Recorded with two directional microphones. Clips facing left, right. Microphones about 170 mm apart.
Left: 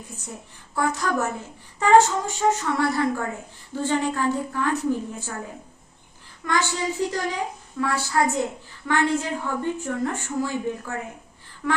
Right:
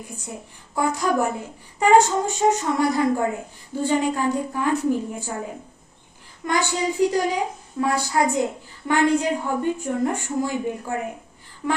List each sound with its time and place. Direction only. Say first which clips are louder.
0.1 s a woman's voice: right 3 dB; 10° right (ahead or behind)
6.4 s a woman's voice: right 2 dB; 15° right (ahead or behind)
11.6 s a sound: right 1 dB; 20° right (ahead or behind)